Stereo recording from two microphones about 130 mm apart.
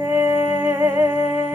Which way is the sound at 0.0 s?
20° right (ahead or behind).